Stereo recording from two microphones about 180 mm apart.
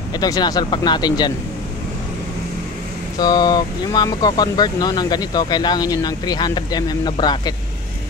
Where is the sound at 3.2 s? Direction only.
20° left (ahead or behind).